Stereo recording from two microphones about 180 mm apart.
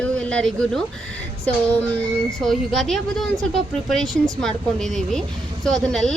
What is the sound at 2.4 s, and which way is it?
A woman's voice, centre (ahead or behind).